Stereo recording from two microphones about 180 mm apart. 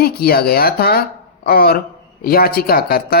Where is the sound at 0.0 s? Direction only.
60° left (ahead or behind).